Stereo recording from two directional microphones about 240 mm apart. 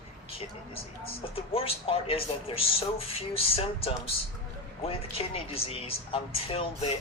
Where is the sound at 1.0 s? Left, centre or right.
Left.